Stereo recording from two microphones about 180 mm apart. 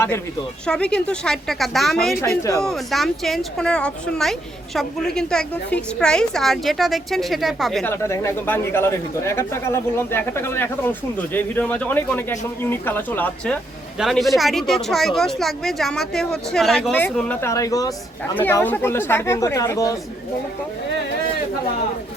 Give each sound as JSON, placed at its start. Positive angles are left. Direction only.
{"t": 0.6, "sound": "speech", "side_deg": 5}
{"t": 2.3, "sound": "speech", "side_deg": 15}
{"t": 2.6, "sound": "speech", "side_deg": 0}
{"t": 7.9, "sound": "speech", "side_deg": 15}